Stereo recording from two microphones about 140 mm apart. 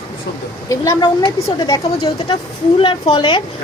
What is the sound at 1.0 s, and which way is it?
A woman's voice, 35° left (ahead or behind).